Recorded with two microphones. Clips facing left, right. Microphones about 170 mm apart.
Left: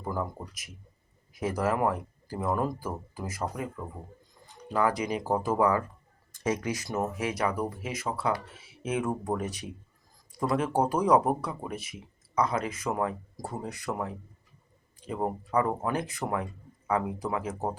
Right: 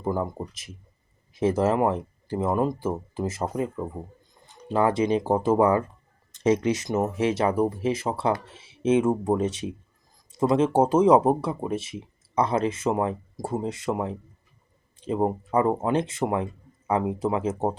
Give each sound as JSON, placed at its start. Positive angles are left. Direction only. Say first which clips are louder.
{"t": 0.0, "sound": "speech", "louder": "right 6 dB", "side_deg": -25}